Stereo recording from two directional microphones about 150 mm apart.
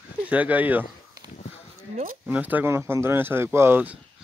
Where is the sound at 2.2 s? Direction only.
10° right (ahead or behind).